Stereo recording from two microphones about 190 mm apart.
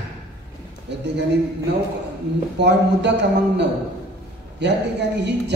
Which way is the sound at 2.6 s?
65° right (ahead or behind).